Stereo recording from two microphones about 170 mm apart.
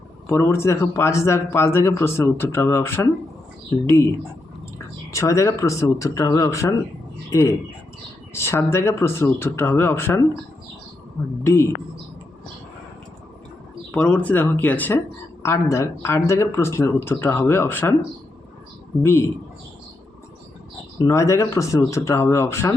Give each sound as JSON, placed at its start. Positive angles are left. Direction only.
{"t": 0.3, "sound": "speech", "side_deg": 15}
{"t": 5.1, "sound": "speech", "side_deg": 15}
{"t": 11.4, "sound": "speech", "side_deg": 15}
{"t": 13.9, "sound": "speech", "side_deg": 5}
{"t": 21.0, "sound": "speech", "side_deg": 15}